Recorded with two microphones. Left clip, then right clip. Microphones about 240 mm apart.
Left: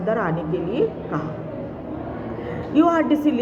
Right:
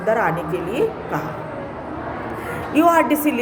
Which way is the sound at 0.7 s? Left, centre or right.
Right.